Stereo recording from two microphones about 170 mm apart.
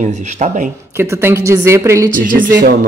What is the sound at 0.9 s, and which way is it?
Speech, 15° right (ahead or behind).